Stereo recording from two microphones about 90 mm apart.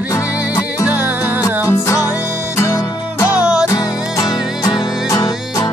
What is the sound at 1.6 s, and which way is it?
Music, 30° left (ahead or behind).